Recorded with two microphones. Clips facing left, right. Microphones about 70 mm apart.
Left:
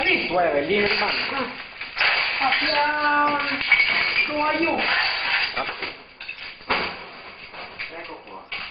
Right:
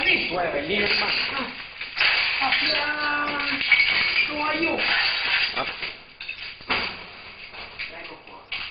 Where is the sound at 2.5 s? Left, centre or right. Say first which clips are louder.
Left 3 dB; centre.